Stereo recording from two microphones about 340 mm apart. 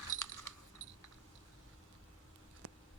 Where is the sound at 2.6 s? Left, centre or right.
Right.